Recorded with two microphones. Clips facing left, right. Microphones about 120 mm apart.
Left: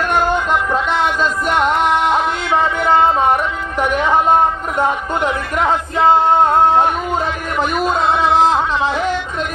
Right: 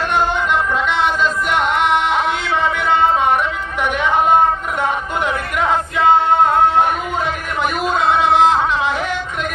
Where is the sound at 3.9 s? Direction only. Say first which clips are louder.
Left 3 dB; 35° left (ahead or behind).